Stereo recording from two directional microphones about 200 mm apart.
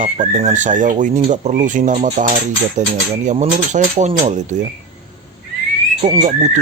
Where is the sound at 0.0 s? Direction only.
35° right (ahead or behind).